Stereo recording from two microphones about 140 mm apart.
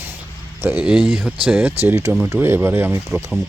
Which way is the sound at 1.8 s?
20° right (ahead or behind).